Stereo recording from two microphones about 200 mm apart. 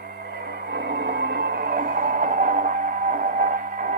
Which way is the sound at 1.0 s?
55° right (ahead or behind).